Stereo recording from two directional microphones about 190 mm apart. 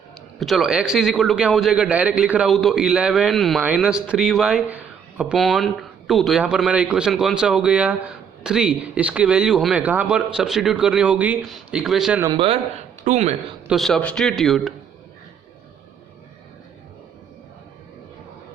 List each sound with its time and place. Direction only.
0.3 s a man's voice: centre (ahead or behind)
12.2 s speech: 25° right (ahead or behind)
13.7 s a man's voice: centre (ahead or behind)